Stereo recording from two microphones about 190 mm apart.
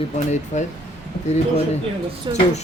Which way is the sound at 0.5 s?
40° left (ahead or behind).